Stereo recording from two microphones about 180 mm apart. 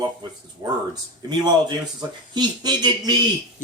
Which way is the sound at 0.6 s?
20° right (ahead or behind).